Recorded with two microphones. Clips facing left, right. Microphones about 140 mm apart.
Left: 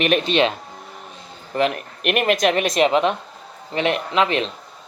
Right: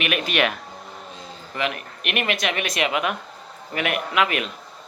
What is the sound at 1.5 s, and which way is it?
Speech, 40° left (ahead or behind).